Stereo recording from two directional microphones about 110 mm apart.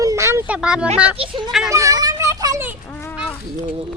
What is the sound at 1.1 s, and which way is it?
Speech, 50° right (ahead or behind).